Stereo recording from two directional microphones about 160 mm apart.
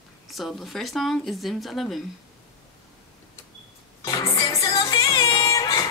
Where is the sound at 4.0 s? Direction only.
20° left (ahead or behind).